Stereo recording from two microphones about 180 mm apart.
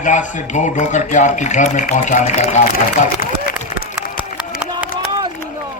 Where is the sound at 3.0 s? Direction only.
55° left (ahead or behind).